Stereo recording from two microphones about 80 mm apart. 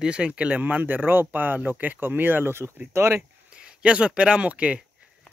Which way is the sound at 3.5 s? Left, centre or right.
Centre.